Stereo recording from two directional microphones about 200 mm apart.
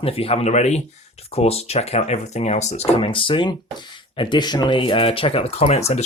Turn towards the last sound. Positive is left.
turn(degrees=30)  # may be behind; listen again after turning